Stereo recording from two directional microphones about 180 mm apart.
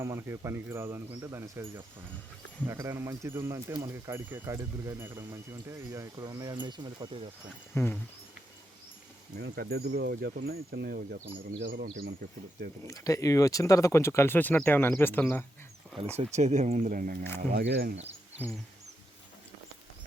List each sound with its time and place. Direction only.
0.0 s speech: 15° right (ahead or behind)
7.7 s speech: 10° left (ahead or behind)
9.4 s speech: 60° right (ahead or behind)
12.9 s speech: 20° left (ahead or behind)
16.1 s speech: 40° right (ahead or behind)
17.5 s speech: 70° right (ahead or behind)
17.9 s a sound: 35° right (ahead or behind)